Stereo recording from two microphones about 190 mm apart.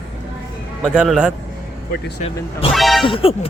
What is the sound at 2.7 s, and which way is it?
Music, centre (ahead or behind).